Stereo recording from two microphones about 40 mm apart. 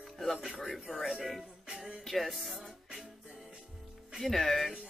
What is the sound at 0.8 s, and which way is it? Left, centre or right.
Speech, centre.